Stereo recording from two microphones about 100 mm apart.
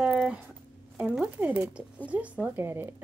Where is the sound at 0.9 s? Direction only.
10° right (ahead or behind).